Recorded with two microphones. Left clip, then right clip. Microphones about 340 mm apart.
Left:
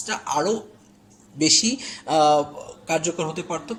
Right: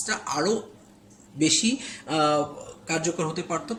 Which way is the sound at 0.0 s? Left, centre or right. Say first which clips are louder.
Left 3 dB; centre.